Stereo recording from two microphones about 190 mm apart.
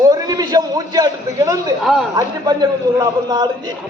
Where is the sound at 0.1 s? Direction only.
20° right (ahead or behind).